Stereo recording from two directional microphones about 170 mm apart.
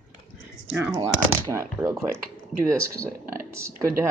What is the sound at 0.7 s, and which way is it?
Speech, 10° right (ahead or behind).